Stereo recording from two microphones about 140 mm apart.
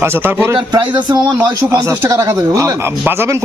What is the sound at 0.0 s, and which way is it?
Speech, 15° right (ahead or behind).